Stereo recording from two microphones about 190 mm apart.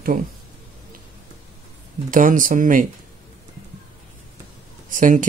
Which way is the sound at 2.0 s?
45° right (ahead or behind).